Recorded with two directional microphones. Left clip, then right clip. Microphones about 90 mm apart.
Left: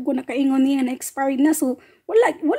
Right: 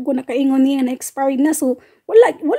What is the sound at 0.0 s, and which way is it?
A woman's voice, 40° right (ahead or behind).